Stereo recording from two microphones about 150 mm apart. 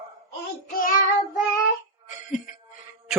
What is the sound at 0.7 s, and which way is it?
Child singing, 70° left (ahead or behind).